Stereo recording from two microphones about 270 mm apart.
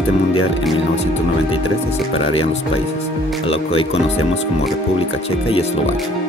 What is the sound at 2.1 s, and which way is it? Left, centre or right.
Speech, left.